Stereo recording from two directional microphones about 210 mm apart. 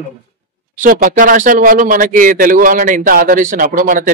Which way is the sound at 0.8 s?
40° right (ahead or behind).